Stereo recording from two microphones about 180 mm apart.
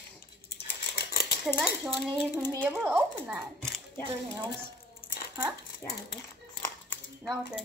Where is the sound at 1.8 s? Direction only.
Centre (ahead or behind).